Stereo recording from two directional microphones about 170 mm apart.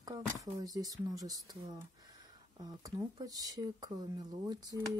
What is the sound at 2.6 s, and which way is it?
Speech, 20° right (ahead or behind).